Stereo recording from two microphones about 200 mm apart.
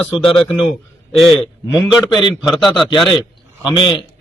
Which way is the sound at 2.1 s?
20° left (ahead or behind).